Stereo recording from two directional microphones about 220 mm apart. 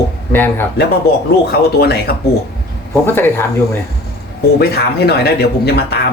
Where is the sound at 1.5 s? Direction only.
45° left (ahead or behind).